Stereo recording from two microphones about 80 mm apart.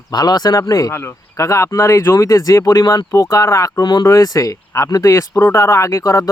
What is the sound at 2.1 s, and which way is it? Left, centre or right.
Speech, left.